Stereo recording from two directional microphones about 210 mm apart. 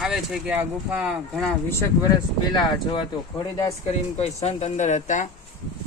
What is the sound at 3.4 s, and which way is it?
Speech, 20° left (ahead or behind).